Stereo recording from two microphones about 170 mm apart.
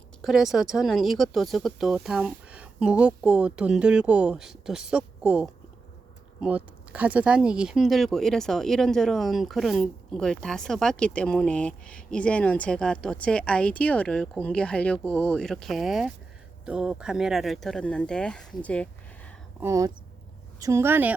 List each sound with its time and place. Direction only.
0.2 s speech: centre (ahead or behind)
19.5 s a woman's voice: 15° right (ahead or behind)